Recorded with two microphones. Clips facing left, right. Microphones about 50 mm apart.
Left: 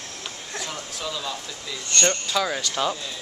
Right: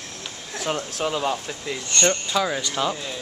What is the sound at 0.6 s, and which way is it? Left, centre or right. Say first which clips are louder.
Speech: right 9 dB; right.